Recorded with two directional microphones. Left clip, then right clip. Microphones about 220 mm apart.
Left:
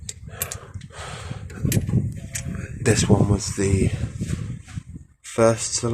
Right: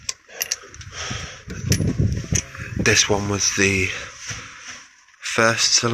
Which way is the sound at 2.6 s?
20° left (ahead or behind).